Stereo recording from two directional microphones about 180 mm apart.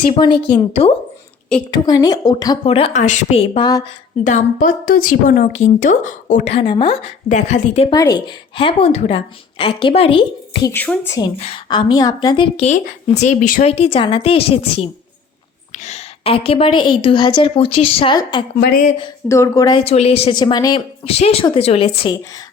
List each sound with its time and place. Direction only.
0.2 s a woman's voice: 25° left (ahead or behind)
1.7 s a woman's voice: 20° left (ahead or behind)
2.6 s a woman's voice: 30° left (ahead or behind)
4.2 s a woman's voice: 45° left (ahead or behind)
6.6 s a woman's voice: 30° left (ahead or behind)
7.3 s a woman's voice: 40° left (ahead or behind)
7.9 s a woman's voice: 20° left (ahead or behind)
10.7 s a woman's voice: 10° left (ahead or behind)
11.3 s a woman's voice: 35° left (ahead or behind)
11.7 s a woman's voice: 25° left (ahead or behind)
12.6 s a woman's voice: 40° left (ahead or behind)
18.6 s a woman's voice: 50° left (ahead or behind)
19.3 s a woman's voice: 15° left (ahead or behind)
19.8 s a woman's voice: 35° left (ahead or behind)